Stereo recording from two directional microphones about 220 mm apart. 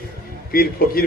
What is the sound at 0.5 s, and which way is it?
Speech, 45° left (ahead or behind).